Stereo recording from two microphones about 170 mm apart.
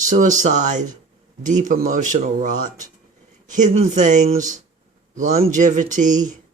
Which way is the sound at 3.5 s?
45° right (ahead or behind).